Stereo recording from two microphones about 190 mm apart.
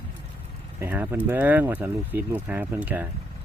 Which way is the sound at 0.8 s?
10° right (ahead or behind).